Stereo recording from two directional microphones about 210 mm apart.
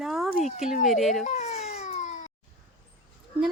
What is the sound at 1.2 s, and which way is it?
Baby cry, 30° left (ahead or behind).